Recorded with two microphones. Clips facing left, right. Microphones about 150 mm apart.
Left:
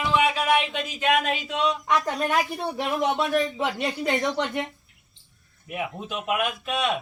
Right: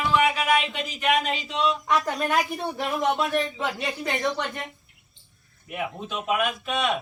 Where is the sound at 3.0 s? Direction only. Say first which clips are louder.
Left 1 dB; 20° left (ahead or behind).